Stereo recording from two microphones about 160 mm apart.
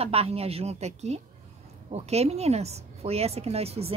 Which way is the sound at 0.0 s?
40° right (ahead or behind).